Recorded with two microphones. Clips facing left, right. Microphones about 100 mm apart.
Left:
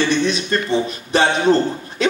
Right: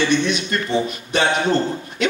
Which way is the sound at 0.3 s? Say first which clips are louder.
Left 2 dB; 35° left (ahead or behind).